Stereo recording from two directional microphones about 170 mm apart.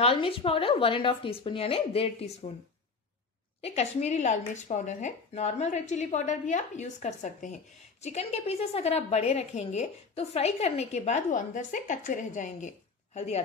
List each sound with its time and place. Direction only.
0.0 s a woman's voice: 30° left (ahead or behind)
3.6 s a woman's voice: 40° left (ahead or behind)